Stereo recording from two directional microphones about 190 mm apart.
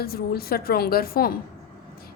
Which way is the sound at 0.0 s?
55° left (ahead or behind).